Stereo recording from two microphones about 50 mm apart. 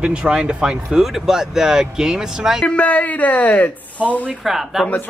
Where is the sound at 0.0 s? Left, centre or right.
Centre.